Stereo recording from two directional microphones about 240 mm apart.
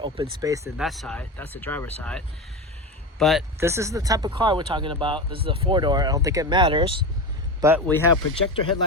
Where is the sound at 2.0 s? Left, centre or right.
Centre.